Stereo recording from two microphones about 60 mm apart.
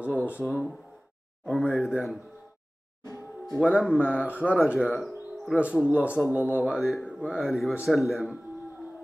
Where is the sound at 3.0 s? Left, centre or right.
Left.